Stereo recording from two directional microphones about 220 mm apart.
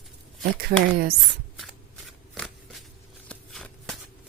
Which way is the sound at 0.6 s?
45° right (ahead or behind).